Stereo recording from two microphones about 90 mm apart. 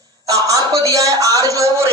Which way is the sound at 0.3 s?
40° right (ahead or behind).